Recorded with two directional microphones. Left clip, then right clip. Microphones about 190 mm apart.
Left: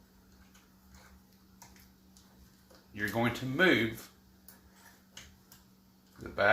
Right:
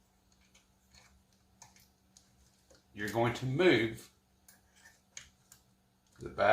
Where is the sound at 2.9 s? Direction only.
45° left (ahead or behind).